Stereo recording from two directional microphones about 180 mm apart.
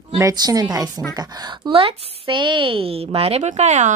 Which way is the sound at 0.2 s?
20° right (ahead or behind).